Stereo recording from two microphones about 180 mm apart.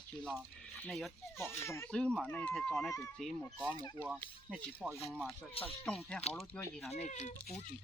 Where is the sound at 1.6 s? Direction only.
15° left (ahead or behind).